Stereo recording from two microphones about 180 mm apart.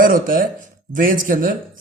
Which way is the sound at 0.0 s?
50° right (ahead or behind).